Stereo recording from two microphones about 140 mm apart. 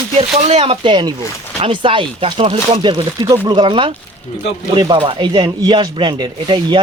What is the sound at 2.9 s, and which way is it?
Speech, 30° right (ahead or behind).